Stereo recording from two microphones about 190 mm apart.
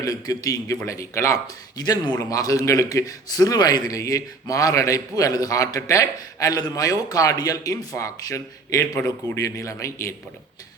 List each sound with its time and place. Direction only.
0.0 s a man's voice: 20° left (ahead or behind)